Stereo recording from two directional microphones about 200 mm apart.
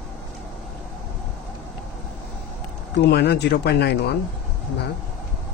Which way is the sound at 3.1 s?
55° left (ahead or behind).